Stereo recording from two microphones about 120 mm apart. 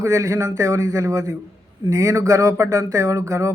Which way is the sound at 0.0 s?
25° right (ahead or behind).